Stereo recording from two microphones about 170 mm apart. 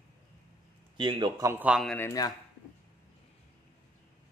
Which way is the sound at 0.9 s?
25° right (ahead or behind).